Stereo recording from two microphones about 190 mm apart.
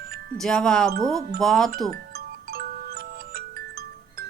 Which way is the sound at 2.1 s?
55° right (ahead or behind).